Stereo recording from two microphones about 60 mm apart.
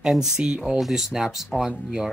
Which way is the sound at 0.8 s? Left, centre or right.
Centre.